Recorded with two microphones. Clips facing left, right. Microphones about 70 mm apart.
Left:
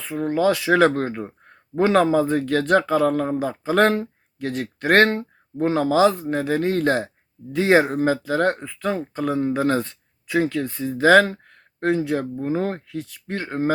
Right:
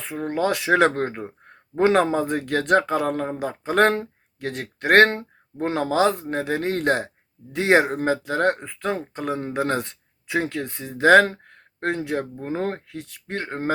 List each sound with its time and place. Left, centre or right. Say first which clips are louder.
0.0 s speech: left 3 dB; right
0.3 s speech: left 4 dB; right
0.5 s speech: left 1 dB; right
9.8 s a sound: left 3 dB; right
10.5 s speech: left 5 dB; right